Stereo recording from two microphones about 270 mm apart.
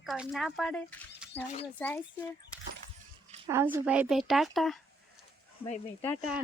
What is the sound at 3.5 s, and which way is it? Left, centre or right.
Speech, centre.